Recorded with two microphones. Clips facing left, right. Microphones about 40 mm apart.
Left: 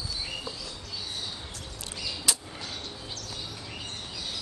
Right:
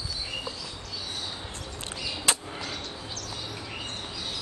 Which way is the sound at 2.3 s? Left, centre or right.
Right.